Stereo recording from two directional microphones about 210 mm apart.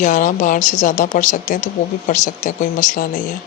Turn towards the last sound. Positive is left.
turn(degrees=40)  # may be behind; listen again after turning